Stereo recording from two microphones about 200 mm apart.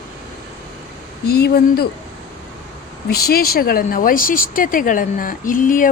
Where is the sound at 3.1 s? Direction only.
50° left (ahead or behind).